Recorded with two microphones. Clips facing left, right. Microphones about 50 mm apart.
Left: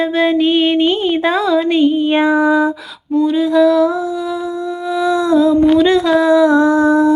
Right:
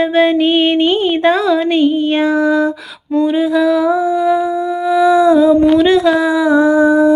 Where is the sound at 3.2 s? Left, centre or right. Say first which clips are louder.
Right 1 dB; centre.